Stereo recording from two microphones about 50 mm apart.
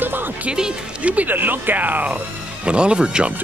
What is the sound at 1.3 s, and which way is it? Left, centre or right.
Speech, right.